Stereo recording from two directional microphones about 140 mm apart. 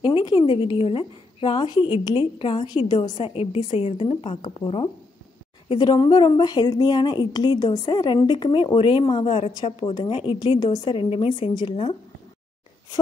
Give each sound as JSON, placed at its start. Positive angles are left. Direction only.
{"t": 0.0, "sound": "a woman's voice", "side_deg": 35}